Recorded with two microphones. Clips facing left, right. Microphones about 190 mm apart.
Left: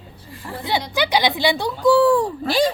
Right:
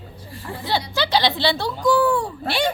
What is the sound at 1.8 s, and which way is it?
Speech, 30° left (ahead or behind).